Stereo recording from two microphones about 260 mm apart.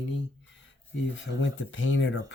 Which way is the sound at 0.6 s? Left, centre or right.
Left.